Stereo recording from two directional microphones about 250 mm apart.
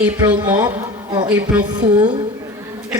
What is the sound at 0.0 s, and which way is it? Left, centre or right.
Speech, centre.